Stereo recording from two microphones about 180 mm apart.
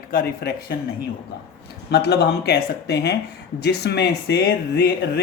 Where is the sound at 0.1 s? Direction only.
55° left (ahead or behind).